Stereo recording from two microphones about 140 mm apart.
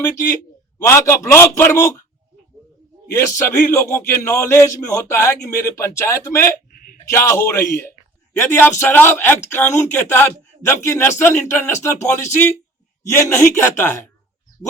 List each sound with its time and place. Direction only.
0.0 s a man's voice: 20° left (ahead or behind)
3.1 s a man's voice: 15° left (ahead or behind)